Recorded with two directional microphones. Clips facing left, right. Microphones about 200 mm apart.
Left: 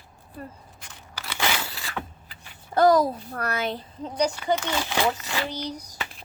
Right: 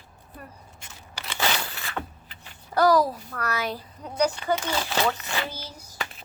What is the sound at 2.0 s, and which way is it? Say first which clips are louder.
Vehicle: right 1 dB; 5° right (ahead or behind).